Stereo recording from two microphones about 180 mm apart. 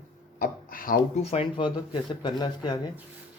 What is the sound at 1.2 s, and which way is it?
Speech, 35° left (ahead or behind).